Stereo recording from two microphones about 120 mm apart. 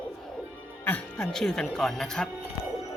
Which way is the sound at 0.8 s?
10° left (ahead or behind).